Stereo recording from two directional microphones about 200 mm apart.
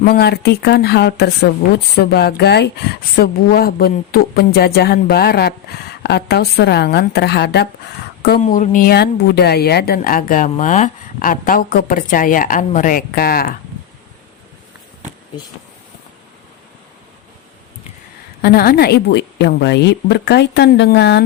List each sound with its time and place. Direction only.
0.0 s a woman's voice: 50° left (ahead or behind)
8.4 s speech: 40° left (ahead or behind)
18.4 s a woman's voice: 50° left (ahead or behind)